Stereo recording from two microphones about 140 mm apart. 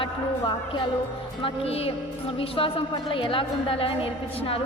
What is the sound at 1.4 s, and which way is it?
A woman's voice, 45° left (ahead or behind).